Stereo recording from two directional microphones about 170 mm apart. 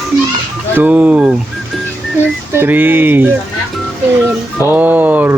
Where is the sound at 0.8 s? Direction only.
10° right (ahead or behind).